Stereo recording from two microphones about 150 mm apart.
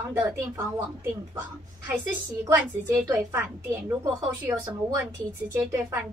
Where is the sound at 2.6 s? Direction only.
10° right (ahead or behind).